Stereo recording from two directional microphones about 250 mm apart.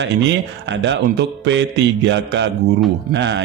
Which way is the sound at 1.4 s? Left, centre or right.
Right.